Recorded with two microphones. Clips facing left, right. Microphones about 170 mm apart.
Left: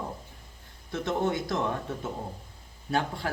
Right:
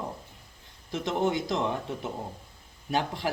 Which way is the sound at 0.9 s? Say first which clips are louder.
Right 1 dB; 20° right (ahead or behind).